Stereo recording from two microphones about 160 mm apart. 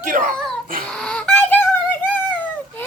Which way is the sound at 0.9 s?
5° left (ahead or behind).